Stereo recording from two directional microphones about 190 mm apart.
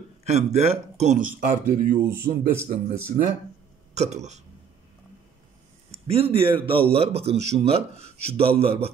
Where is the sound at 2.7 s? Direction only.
45° right (ahead or behind).